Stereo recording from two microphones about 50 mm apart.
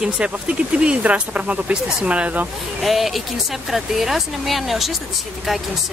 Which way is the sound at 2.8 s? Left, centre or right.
Centre.